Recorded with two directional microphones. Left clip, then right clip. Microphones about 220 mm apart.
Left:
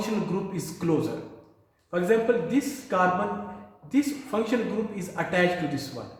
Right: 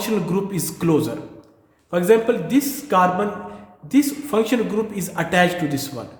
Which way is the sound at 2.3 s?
55° right (ahead or behind).